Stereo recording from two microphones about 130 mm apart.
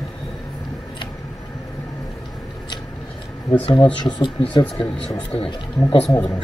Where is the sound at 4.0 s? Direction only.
40° left (ahead or behind).